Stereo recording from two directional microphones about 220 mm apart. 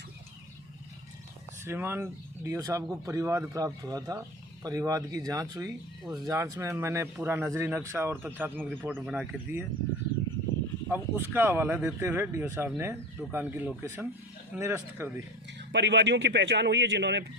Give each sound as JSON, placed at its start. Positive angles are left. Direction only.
{"t": 1.6, "sound": "speech", "side_deg": -10}
{"t": 10.8, "sound": "speech", "side_deg": -10}
{"t": 15.4, "sound": "a man's voice", "side_deg": -50}